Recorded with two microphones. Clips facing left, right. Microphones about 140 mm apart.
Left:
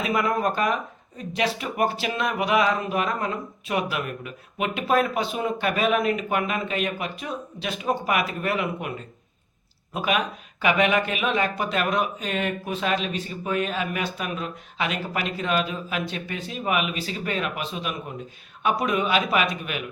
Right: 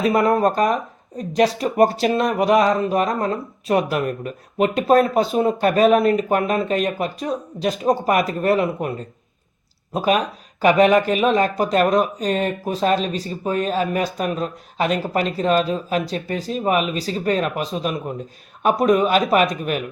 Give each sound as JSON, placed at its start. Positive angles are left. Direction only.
{"t": 0.0, "sound": "speech", "side_deg": -40}